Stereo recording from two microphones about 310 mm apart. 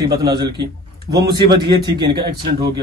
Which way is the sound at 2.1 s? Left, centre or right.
Right.